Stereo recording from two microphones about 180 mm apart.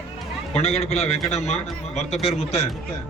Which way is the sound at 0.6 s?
35° left (ahead or behind).